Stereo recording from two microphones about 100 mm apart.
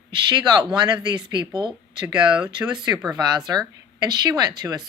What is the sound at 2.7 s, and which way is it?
Speech, 45° right (ahead or behind).